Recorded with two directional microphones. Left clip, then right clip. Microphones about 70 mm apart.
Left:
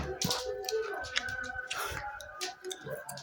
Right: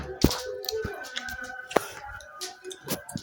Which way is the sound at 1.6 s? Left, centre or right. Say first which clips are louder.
Right 8 dB; left.